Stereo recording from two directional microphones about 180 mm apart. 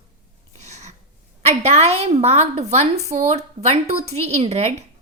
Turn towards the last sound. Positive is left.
turn(degrees=-40)  # may be behind; listen again after turning